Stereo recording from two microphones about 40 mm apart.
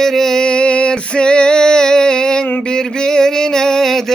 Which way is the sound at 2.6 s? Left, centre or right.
Centre.